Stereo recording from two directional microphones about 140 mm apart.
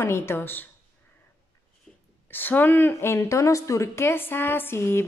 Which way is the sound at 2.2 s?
15° left (ahead or behind).